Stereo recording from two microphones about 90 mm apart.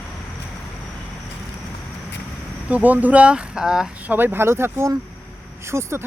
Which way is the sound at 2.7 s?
15° right (ahead or behind).